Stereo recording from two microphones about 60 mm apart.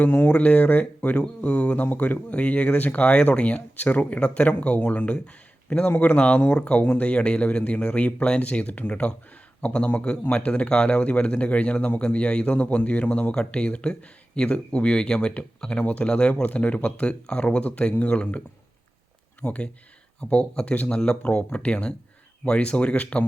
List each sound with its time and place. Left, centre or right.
0.0 s speech: left
0.3 s speech: left